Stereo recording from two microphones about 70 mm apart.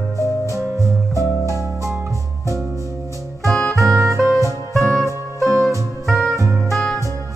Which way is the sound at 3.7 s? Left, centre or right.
Right.